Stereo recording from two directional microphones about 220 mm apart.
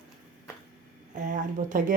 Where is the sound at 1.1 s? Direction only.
35° right (ahead or behind).